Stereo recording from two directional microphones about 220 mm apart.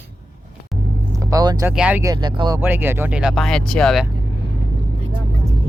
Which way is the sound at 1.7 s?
5° right (ahead or behind).